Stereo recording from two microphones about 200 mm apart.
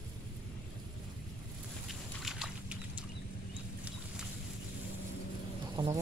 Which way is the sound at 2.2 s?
5° right (ahead or behind).